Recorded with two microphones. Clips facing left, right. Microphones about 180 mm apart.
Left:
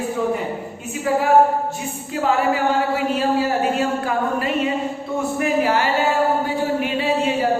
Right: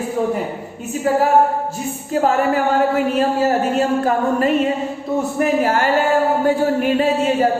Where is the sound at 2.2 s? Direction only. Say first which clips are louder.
Right 1 dB; 50° right (ahead or behind).